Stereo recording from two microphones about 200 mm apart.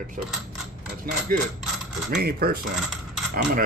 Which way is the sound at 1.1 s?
45° right (ahead or behind).